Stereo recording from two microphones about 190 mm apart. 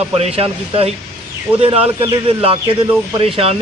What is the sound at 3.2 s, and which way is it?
Speech, 30° right (ahead or behind).